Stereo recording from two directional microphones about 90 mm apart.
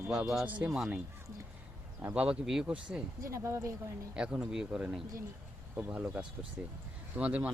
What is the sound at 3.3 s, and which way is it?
Speech, 30° right (ahead or behind).